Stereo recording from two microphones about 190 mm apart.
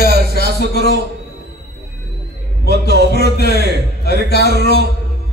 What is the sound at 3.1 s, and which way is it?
A man's voice, 60° left (ahead or behind).